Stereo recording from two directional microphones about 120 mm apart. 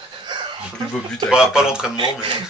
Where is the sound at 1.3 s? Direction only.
5° right (ahead or behind).